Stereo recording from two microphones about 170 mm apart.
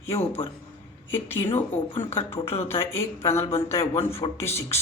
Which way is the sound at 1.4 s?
35° left (ahead or behind).